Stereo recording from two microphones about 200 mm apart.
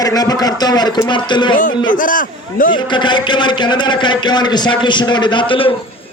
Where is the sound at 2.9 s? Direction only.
25° left (ahead or behind).